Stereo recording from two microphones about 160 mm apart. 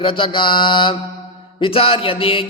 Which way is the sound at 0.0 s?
35° left (ahead or behind).